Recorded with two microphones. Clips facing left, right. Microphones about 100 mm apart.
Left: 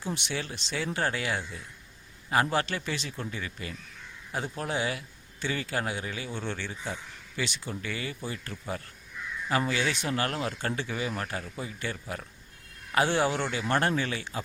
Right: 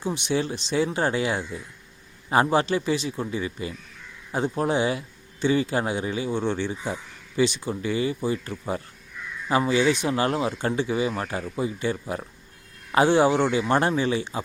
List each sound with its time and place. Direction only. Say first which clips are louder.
0.0 s a man's voice: right 8 dB; 20° right (ahead or behind)